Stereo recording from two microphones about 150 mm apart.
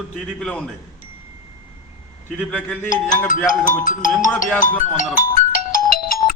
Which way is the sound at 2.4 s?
5° left (ahead or behind).